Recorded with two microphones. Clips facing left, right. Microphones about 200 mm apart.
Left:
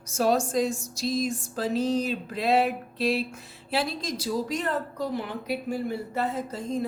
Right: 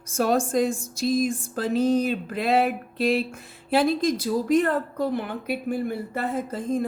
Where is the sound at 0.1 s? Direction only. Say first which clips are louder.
Right 2 dB; 55° right (ahead or behind).